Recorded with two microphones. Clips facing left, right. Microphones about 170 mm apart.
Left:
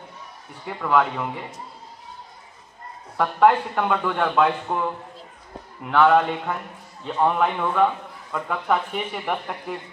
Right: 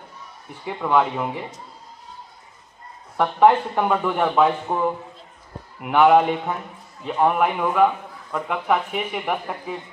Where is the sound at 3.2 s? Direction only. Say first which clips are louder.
Right 2 dB; 20° right (ahead or behind).